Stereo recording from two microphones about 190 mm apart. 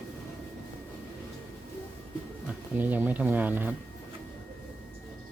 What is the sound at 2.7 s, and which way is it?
Speech, 10° right (ahead or behind).